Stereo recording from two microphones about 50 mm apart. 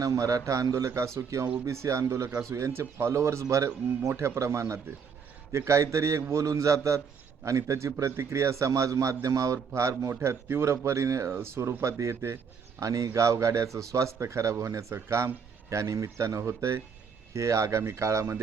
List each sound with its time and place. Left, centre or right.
0.1 s a man's voice: right
4.2 s a man's voice: right
10.2 s speech: right
12.8 s a man's voice: right
15.7 s speech: right
17.3 s speech: right